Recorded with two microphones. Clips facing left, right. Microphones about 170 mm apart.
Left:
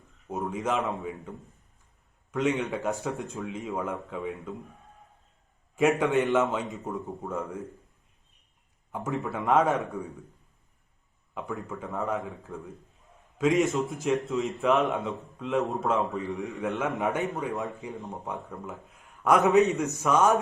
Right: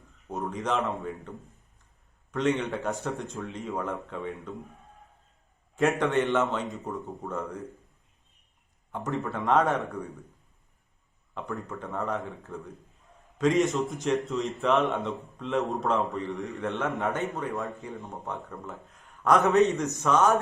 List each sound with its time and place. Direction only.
0.3 s a man's voice: 5° left (ahead or behind)
2.3 s a man's voice: centre (ahead or behind)
5.7 s a man's voice: centre (ahead or behind)
8.9 s a man's voice: 5° left (ahead or behind)
11.3 s a man's voice: centre (ahead or behind)
17.0 s speech: 15° left (ahead or behind)
18.5 s a man's voice: 5° left (ahead or behind)